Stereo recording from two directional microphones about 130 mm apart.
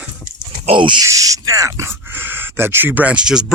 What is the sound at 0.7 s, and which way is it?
Speech, 40° right (ahead or behind).